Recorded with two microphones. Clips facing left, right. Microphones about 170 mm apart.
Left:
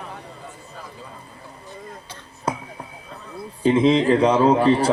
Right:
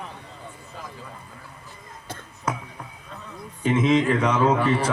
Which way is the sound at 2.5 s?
30° left (ahead or behind).